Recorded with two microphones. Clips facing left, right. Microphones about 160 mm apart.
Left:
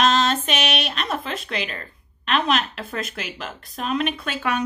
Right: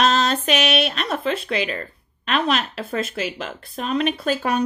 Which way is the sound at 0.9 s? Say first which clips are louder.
Right 4 dB; 40° right (ahead or behind).